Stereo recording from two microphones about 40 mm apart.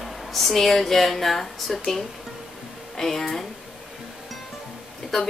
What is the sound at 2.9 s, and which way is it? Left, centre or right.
Speech, centre.